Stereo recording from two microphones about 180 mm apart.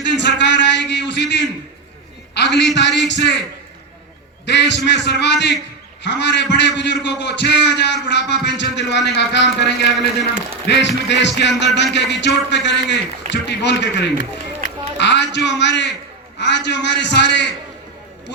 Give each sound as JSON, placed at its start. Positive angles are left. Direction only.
{"t": 0.0, "sound": "a sound", "side_deg": 75}
{"t": 2.3, "sound": "a man's voice", "side_deg": 70}
{"t": 4.4, "sound": "a man's voice", "side_deg": 75}